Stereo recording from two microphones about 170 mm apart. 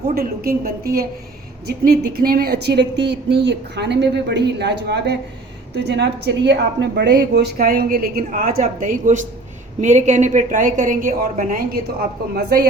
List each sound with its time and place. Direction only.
0.1 s a woman's voice: 60° right (ahead or behind)